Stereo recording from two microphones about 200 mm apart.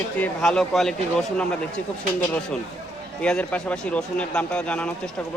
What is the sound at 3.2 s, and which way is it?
Speech, 5° left (ahead or behind).